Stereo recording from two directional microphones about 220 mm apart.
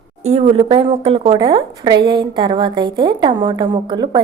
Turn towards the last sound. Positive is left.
turn(degrees=-20)  # may be behind; listen again after turning